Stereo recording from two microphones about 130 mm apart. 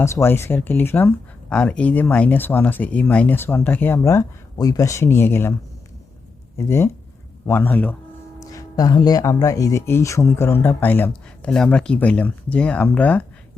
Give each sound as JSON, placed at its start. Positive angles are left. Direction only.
{"t": 0.0, "sound": "speech", "side_deg": 20}
{"t": 6.6, "sound": "speech", "side_deg": 20}
{"t": 8.4, "sound": "speech", "side_deg": 25}